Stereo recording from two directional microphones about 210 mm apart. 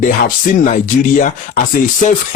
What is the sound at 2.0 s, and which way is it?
Speech, 35° left (ahead or behind).